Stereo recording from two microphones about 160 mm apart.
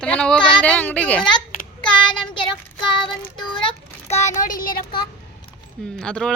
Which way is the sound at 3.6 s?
45° left (ahead or behind).